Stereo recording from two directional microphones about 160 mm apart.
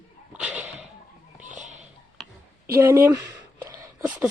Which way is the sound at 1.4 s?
50° right (ahead or behind).